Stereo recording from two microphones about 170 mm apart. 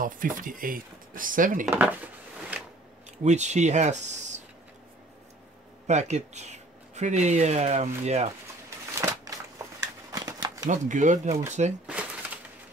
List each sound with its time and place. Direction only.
0.0 s speech: 55° right (ahead or behind)
1.7 s speech: 10° right (ahead or behind)
2.5 s scissors: 10° right (ahead or behind)
3.3 s speech: 45° right (ahead or behind)
5.9 s speech: 45° right (ahead or behind)
8.6 s a sound: 15° right (ahead or behind)
10.7 s speech: 45° right (ahead or behind)